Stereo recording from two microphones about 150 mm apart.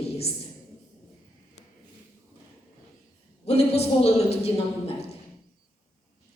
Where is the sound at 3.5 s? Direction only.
45° left (ahead or behind).